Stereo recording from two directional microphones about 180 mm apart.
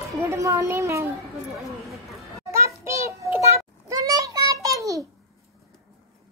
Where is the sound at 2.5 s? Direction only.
15° right (ahead or behind).